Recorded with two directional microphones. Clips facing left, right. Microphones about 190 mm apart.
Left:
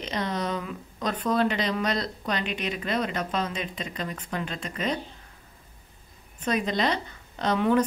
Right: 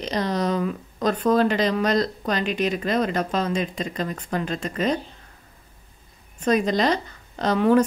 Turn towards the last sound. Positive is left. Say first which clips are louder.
# right 5 dB
turn(degrees=-40)  # may be behind; listen again after turning